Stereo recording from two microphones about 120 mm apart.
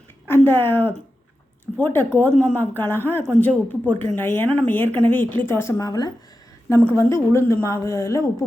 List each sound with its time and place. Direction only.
0.3 s a woman's voice: 20° left (ahead or behind)
5.8 s speech: 30° left (ahead or behind)
6.7 s speech: 20° left (ahead or behind)